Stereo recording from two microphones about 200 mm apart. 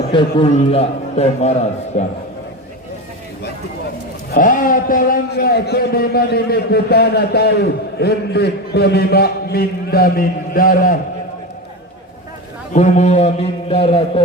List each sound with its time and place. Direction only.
0.1 s a man's voice: 25° left (ahead or behind)
4.4 s a man's voice: 45° left (ahead or behind)
12.7 s a man's voice: 35° left (ahead or behind)